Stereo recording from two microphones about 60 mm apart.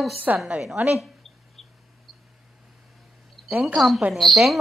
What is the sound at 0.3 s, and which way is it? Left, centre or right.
Speech, right.